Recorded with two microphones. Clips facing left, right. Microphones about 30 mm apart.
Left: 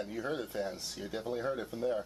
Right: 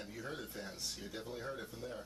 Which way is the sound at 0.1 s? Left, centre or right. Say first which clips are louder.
Left 9 dB; left.